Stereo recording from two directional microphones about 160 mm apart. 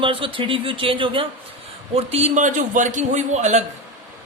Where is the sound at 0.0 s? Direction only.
30° right (ahead or behind).